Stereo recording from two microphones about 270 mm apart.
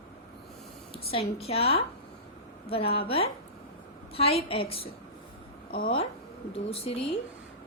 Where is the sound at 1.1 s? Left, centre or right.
Left.